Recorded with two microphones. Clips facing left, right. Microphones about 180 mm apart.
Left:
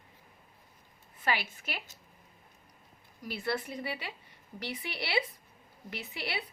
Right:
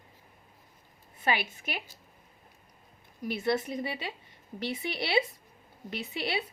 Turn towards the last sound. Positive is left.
turn(degrees=-25)  # may be behind; listen again after turning